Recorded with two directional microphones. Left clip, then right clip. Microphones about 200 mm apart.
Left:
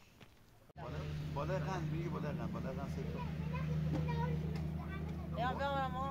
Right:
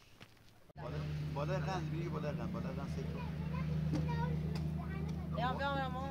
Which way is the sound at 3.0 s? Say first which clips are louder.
Even; 50° left (ahead or behind).